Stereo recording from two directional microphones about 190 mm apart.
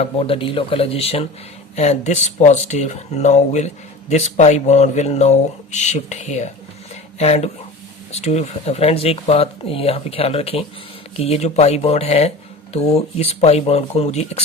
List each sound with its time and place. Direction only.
0.0 s speech: 30° left (ahead or behind)